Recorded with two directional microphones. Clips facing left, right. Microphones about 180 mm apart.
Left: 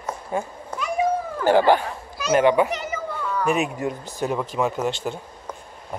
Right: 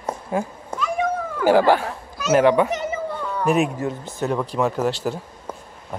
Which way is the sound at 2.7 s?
25° right (ahead or behind).